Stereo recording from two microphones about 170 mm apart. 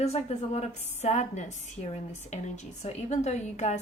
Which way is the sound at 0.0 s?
40° left (ahead or behind).